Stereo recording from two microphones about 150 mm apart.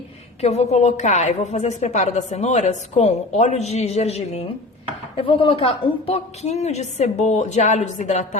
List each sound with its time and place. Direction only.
0.4 s a woman's voice: 45° left (ahead or behind)